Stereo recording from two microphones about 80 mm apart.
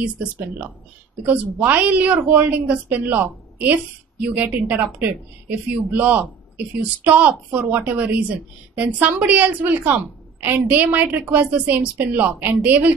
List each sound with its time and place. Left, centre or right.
0.0 s a woman's voice: centre